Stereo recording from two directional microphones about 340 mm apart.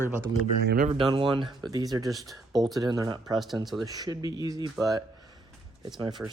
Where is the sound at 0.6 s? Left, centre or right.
Right; by 2.0 s centre.